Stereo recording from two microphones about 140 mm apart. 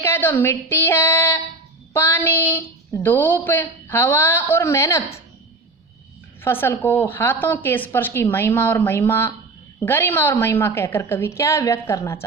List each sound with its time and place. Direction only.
0.0 s a woman's voice: 15° left (ahead or behind)
6.4 s a woman's voice: 15° left (ahead or behind)